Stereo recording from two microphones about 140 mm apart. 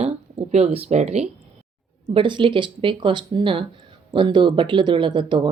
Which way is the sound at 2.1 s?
35° right (ahead or behind).